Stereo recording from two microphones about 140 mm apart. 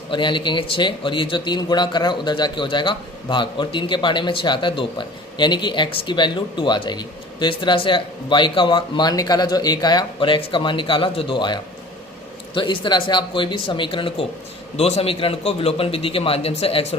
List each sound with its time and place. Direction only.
0.1 s a man's voice: 35° left (ahead or behind)